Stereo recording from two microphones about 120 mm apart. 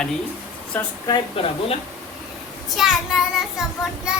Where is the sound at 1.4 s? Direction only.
50° left (ahead or behind).